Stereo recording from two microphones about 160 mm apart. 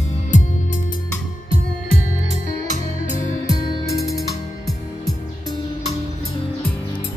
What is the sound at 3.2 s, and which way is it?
Music, 35° right (ahead or behind).